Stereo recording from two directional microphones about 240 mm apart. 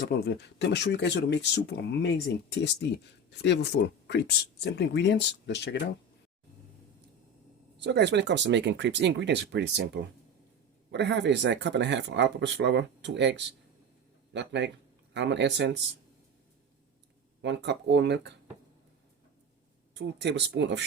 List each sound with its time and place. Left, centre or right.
0.0 s speech: left
7.8 s speech: right
17.4 s speech: right
19.9 s speech: right